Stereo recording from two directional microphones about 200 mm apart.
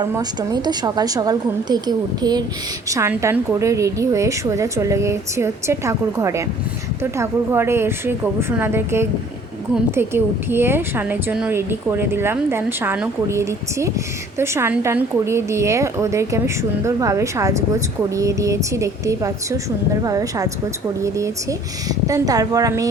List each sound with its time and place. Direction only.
0.0 s a woman's voice: 20° right (ahead or behind)
21.8 s a woman's voice: 15° right (ahead or behind)